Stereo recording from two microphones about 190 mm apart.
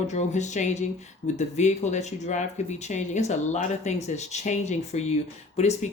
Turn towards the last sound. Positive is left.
turn(degrees=35)  # may be behind; listen again after turning